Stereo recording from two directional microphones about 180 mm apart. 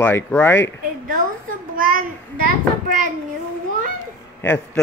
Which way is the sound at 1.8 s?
50° right (ahead or behind).